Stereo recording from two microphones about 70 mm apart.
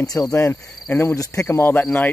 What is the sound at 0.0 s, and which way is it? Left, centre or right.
Cricket, left.